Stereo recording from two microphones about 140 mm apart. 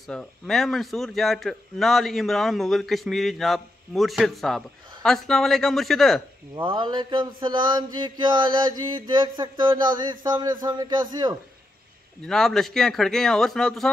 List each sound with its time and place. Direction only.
0.1 s a man's voice: 5° left (ahead or behind)
6.5 s mantra: 35° right (ahead or behind)
12.2 s a man's voice: 5° left (ahead or behind)